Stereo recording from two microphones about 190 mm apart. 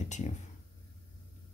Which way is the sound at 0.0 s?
40° left (ahead or behind).